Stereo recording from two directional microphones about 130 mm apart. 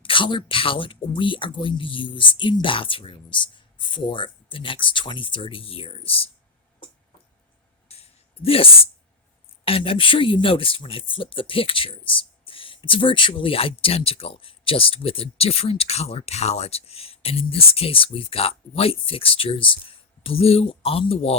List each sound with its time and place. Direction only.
0.0 s speech: 40° left (ahead or behind)
7.9 s a sound: 50° left (ahead or behind)
9.6 s speech: 45° left (ahead or behind)